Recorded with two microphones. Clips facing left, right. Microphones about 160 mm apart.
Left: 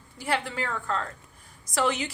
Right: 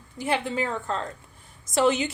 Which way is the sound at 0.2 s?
20° right (ahead or behind).